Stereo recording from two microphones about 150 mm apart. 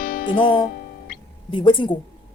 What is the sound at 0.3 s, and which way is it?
Speech, 35° left (ahead or behind).